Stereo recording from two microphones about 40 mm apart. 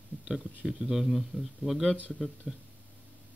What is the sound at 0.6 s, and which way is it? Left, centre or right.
Speech, centre.